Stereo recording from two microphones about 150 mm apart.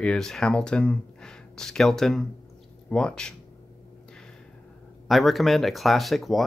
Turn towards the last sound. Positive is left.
turn(degrees=0)  # may be behind; listen again after turning